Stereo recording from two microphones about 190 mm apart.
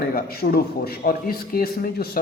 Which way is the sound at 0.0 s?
50° left (ahead or behind).